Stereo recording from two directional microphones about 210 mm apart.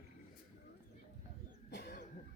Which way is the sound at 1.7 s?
50° left (ahead or behind).